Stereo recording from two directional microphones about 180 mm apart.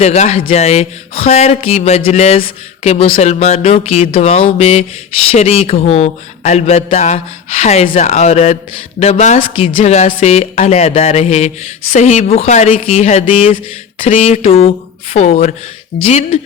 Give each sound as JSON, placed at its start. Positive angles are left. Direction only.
{"t": 0.0, "sound": "speech", "side_deg": 35}